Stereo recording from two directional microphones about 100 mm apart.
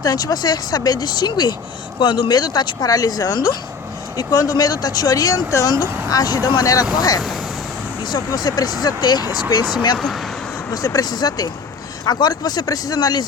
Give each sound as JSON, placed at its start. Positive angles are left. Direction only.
{"t": 0.0, "sound": "speech", "side_deg": 40}
{"t": 8.1, "sound": "speech", "side_deg": 40}